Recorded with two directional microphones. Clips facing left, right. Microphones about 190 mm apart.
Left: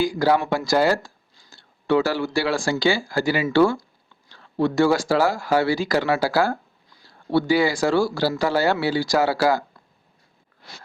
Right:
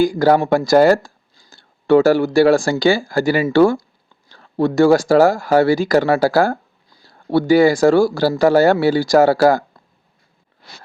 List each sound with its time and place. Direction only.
0.0 s speech: 50° right (ahead or behind)